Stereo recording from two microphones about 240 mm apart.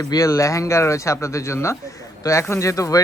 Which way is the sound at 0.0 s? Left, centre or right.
Centre.